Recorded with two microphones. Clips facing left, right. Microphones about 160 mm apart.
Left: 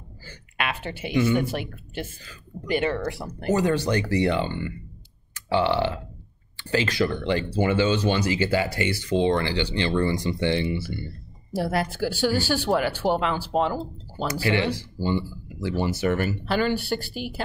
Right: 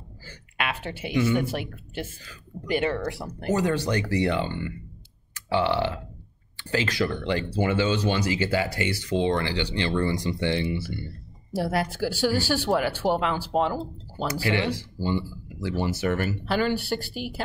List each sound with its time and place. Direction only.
0.6 s speech: 5° right (ahead or behind)
3.5 s speech: 25° left (ahead or behind)
11.5 s speech: 5° right (ahead or behind)
14.4 s speech: 25° left (ahead or behind)
16.4 s speech: 5° right (ahead or behind)